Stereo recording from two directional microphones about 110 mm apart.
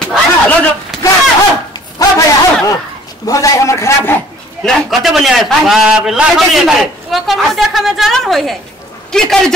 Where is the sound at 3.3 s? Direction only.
30° left (ahead or behind).